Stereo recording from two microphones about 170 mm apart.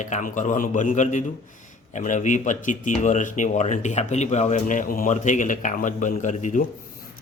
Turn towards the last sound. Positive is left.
turn(degrees=45)  # may be behind; listen again after turning